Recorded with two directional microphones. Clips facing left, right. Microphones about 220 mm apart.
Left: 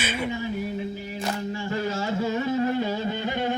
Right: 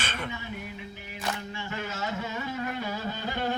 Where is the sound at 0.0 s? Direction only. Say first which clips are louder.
Left 7 dB; 10° left (ahead or behind).